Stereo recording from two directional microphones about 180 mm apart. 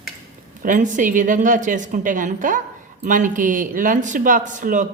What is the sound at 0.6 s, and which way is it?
Speech, 45° right (ahead or behind).